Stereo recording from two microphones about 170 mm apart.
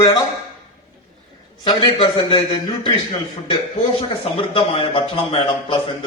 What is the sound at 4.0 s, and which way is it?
A man's voice, 30° left (ahead or behind).